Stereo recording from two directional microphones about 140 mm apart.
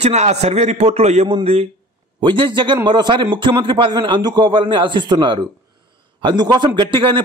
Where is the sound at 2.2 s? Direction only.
35° right (ahead or behind).